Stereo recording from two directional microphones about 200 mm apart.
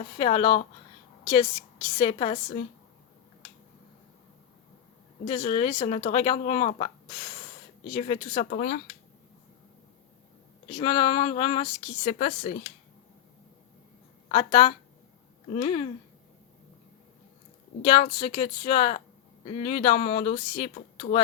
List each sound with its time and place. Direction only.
0.2 s a woman's voice: 25° left (ahead or behind)
5.2 s speech: 25° left (ahead or behind)
7.9 s speech: 30° left (ahead or behind)
8.4 s speech: 45° left (ahead or behind)
10.8 s speech: 25° left (ahead or behind)
14.3 s speech: 25° left (ahead or behind)
17.8 s speech: 25° left (ahead or behind)
21.0 s speech: 45° left (ahead or behind)